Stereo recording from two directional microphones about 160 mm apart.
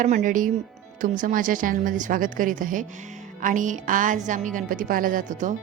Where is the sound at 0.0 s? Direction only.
50° right (ahead or behind).